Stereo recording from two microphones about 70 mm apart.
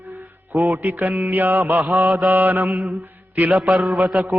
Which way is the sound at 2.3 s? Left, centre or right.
Right.